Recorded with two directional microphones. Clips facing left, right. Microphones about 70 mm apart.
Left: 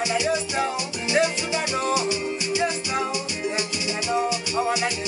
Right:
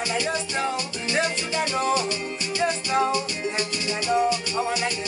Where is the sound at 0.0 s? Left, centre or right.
Centre.